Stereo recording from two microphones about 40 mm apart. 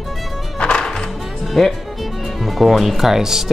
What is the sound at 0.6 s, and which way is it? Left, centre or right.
Music, left.